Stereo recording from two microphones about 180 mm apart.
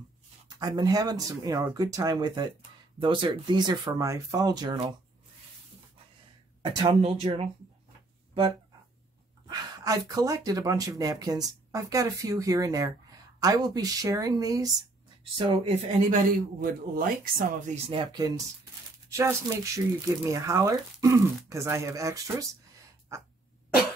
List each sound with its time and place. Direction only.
0.5 s speech: 20° right (ahead or behind)
6.6 s speech: 30° right (ahead or behind)
9.5 s speech: 20° right (ahead or behind)
16.1 s speech: 50° right (ahead or behind)
17.8 s speech: 25° right (ahead or behind)